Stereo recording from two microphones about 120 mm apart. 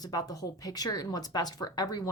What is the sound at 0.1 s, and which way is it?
A woman's voice, 30° left (ahead or behind).